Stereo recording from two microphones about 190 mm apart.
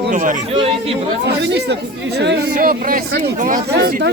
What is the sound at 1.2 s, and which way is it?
Speech, 65° right (ahead or behind).